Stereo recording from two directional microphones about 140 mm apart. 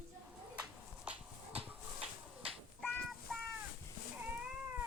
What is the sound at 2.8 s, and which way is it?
Child singing, centre (ahead or behind).